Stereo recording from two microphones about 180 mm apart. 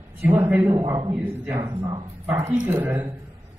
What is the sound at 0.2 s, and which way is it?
A man's voice, 10° right (ahead or behind).